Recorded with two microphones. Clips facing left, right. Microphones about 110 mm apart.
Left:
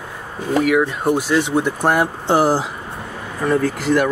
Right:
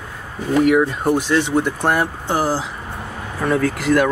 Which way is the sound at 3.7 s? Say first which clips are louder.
Right 1 dB; 25° left (ahead or behind).